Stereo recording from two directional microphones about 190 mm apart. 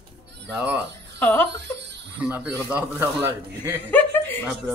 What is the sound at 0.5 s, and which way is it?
Speech, 5° right (ahead or behind).